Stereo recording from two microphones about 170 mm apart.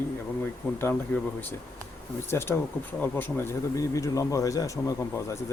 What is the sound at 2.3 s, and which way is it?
Speech, 15° left (ahead or behind).